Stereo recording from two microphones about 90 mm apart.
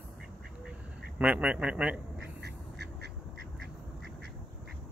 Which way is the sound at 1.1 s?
15° right (ahead or behind).